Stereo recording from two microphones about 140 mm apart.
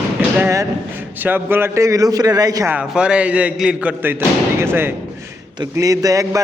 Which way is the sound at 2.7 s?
5° right (ahead or behind).